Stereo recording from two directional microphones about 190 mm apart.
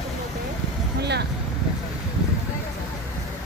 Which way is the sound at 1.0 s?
60° right (ahead or behind).